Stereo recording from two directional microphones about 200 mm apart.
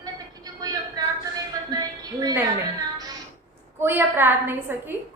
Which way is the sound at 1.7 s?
20° right (ahead or behind).